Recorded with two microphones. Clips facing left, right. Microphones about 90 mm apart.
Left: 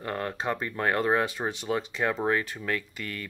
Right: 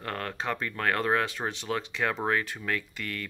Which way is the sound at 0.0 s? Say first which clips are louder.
Left 2 dB; 15° left (ahead or behind).